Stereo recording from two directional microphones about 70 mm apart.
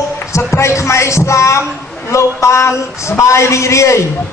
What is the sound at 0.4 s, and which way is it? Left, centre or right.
Music, left.